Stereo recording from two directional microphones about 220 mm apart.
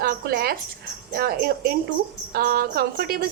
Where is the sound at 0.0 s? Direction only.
45° right (ahead or behind).